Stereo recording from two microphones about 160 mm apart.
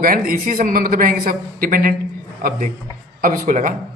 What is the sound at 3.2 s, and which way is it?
Speech, 55° right (ahead or behind).